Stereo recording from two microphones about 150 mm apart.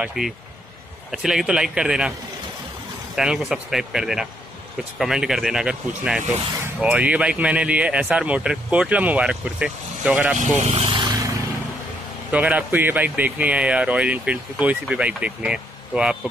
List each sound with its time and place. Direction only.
0.0 s speech: centre (ahead or behind)
3.2 s speech: 5° right (ahead or behind)
10.3 s speech: 50° right (ahead or behind)
12.3 s speech: 10° right (ahead or behind)